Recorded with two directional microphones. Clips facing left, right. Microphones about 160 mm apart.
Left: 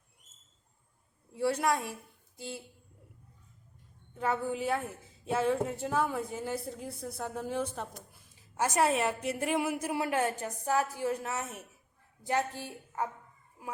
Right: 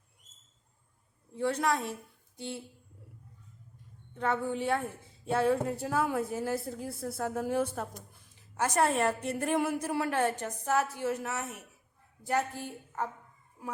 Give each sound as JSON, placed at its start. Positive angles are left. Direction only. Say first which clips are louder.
{"t": 1.4, "sound": "a woman's voice", "louder": "even", "side_deg": 10}
{"t": 4.2, "sound": "speech", "louder": "right 1 dB", "side_deg": 5}
{"t": 8.5, "sound": "a woman's voice", "louder": "even", "side_deg": 10}